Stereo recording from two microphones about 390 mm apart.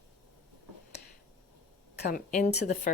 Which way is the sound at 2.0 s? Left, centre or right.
Left.